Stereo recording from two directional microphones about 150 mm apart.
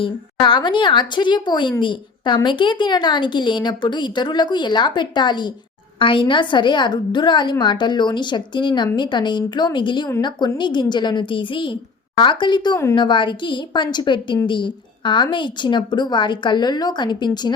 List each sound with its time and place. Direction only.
0.0 s a woman's voice: 35° left (ahead or behind)